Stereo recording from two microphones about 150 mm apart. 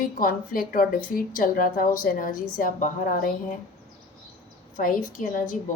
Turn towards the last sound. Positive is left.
turn(degrees=65)  # may be behind; listen again after turning